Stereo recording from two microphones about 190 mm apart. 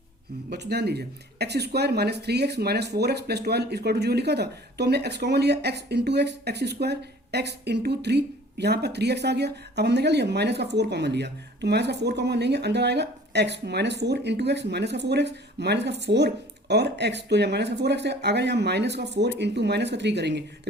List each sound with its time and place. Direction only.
0.5 s speech: 60° right (ahead or behind)